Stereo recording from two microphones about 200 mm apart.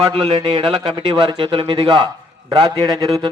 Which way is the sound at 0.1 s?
25° right (ahead or behind).